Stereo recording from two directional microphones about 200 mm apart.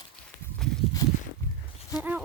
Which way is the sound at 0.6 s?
5° left (ahead or behind).